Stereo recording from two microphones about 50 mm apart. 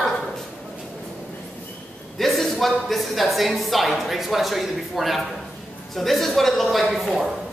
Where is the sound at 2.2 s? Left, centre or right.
Centre.